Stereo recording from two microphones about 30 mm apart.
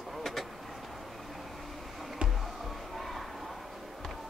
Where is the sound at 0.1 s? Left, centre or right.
Centre.